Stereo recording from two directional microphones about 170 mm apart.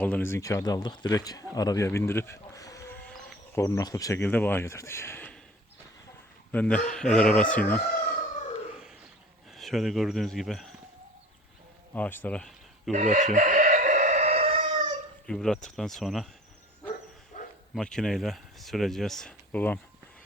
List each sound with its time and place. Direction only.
0.0 s speech: 10° left (ahead or behind)
6.5 s speech: 5° left (ahead or behind)
9.6 s speech: centre (ahead or behind)
11.9 s speech: 10° left (ahead or behind)
12.9 s chicken: 45° right (ahead or behind)
15.3 s speech: 5° left (ahead or behind)
17.7 s speech: 5° left (ahead or behind)